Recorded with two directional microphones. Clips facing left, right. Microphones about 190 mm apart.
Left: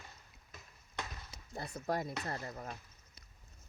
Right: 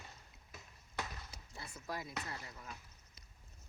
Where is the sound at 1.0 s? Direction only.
5° right (ahead or behind).